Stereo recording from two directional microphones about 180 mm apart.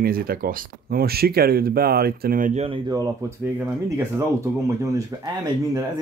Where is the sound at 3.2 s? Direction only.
15° right (ahead or behind).